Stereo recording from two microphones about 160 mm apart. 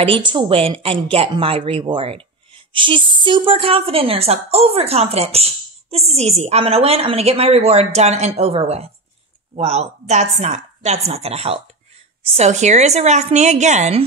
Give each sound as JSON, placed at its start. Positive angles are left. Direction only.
{"t": 0.0, "sound": "a woman's voice", "side_deg": -30}